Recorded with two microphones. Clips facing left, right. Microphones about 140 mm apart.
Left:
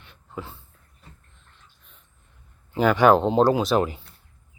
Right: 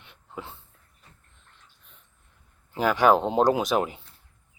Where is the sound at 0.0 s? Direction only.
20° right (ahead or behind).